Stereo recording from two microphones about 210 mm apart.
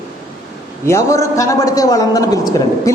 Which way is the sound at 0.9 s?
15° left (ahead or behind).